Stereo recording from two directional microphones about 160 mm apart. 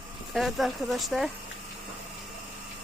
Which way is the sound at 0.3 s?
Centre (ahead or behind).